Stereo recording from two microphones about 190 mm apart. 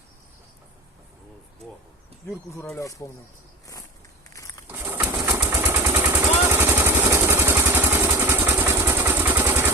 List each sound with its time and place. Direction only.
2.5 s speech: 15° left (ahead or behind)
4.4 s a sound: 15° left (ahead or behind)
4.7 s pigeon: 10° right (ahead or behind)
5.5 s vehicle: 10° right (ahead or behind)